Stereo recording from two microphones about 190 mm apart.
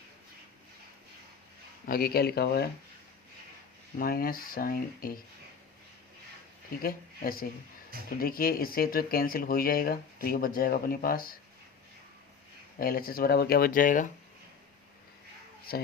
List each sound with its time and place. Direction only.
1.9 s speech: 55° left (ahead or behind)
3.9 s speech: 50° left (ahead or behind)
6.8 s speech: 50° left (ahead or behind)
12.8 s speech: 50° left (ahead or behind)